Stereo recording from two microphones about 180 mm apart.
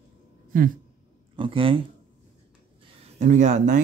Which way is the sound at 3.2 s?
40° right (ahead or behind).